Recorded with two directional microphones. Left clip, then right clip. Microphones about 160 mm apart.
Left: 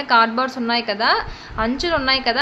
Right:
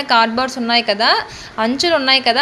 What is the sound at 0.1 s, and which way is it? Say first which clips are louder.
A woman's voice: right 1 dB; 20° right (ahead or behind).